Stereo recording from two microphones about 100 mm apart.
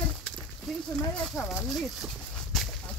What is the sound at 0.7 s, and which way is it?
Speech, centre (ahead or behind).